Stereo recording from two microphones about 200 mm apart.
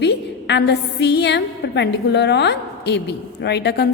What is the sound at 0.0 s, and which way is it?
A woman's voice, 60° left (ahead or behind).